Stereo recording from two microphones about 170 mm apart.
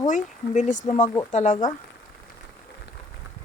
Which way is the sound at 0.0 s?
45° left (ahead or behind).